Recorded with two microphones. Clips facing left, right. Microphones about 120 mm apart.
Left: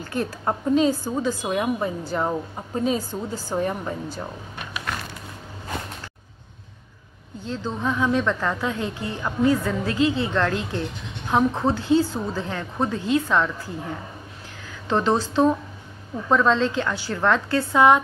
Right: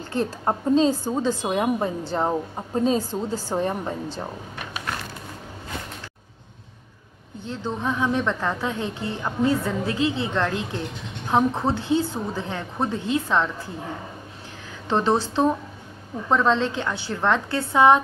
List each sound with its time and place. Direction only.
0.1 s a woman's voice: 25° right (ahead or behind)
7.4 s a woman's voice: 20° right (ahead or behind)
14.9 s a woman's voice: 20° right (ahead or behind)